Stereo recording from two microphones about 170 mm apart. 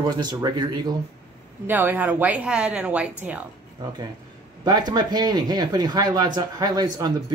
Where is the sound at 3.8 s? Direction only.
25° right (ahead or behind).